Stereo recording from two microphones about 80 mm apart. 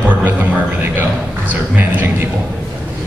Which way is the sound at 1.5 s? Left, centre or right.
Right.